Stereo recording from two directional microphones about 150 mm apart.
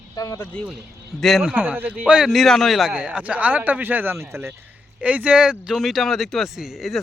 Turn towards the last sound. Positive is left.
turn(degrees=0)  # may be behind; listen again after turning